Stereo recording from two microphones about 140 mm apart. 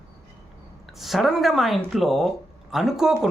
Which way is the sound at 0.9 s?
Centre (ahead or behind).